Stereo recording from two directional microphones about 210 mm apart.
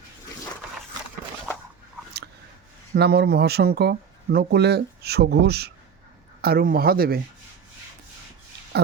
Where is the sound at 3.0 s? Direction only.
50° right (ahead or behind).